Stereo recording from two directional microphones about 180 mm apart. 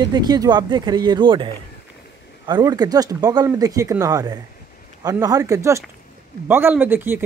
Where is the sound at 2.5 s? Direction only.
20° right (ahead or behind).